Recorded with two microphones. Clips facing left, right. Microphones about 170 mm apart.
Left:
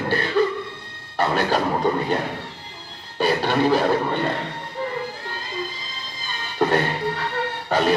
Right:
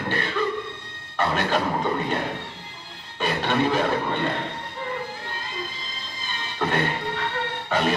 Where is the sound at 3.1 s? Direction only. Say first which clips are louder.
Left 4 dB; 35° left (ahead or behind).